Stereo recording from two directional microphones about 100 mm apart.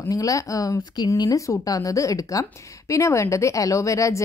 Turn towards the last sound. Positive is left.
turn(degrees=30)  # may be behind; listen again after turning